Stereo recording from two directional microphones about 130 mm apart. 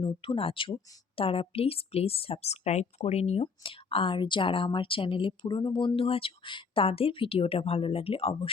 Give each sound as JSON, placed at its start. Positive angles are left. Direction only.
{"t": 0.1, "sound": "speech", "side_deg": 45}
{"t": 3.4, "sound": "speech", "side_deg": 45}